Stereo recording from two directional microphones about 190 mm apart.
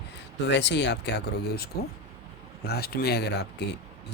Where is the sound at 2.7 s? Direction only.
55° left (ahead or behind).